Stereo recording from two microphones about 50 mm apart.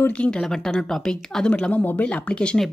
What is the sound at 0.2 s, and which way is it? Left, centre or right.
Speech, centre.